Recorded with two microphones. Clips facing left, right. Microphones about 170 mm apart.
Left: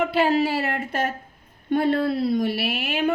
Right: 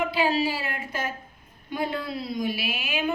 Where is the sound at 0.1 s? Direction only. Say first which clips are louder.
Left 4 dB; 65° left (ahead or behind).